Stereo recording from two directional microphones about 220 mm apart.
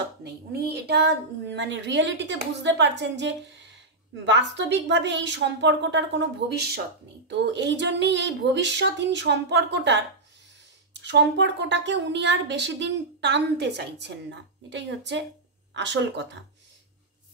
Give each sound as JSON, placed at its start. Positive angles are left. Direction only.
{"t": 0.2, "sound": "a woman's voice", "side_deg": -45}